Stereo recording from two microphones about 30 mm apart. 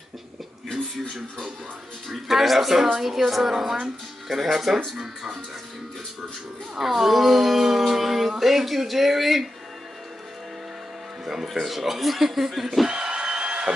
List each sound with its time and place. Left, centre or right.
2.0 s speech: centre
6.8 s speech: centre
11.4 s speech: centre
12.8 s a sound: right